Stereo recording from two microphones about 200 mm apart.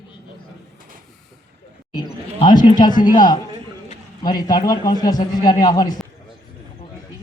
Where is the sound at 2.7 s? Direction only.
20° left (ahead or behind).